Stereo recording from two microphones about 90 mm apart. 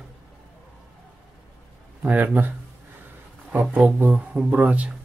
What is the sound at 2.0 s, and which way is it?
Speech, 15° right (ahead or behind).